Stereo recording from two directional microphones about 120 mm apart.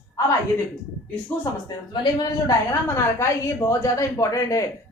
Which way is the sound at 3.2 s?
25° left (ahead or behind).